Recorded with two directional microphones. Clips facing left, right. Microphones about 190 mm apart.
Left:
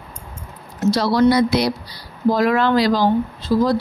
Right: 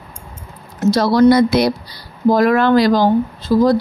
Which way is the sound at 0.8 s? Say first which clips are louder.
Right 4 dB; 45° right (ahead or behind).